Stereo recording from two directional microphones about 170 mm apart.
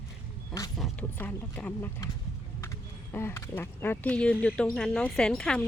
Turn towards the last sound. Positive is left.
turn(degrees=5)  # may be behind; listen again after turning